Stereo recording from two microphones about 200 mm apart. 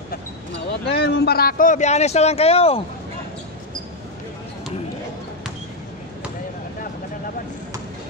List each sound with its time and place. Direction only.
0.8 s speech: 55° left (ahead or behind); by 2.8 s 30° left (ahead or behind)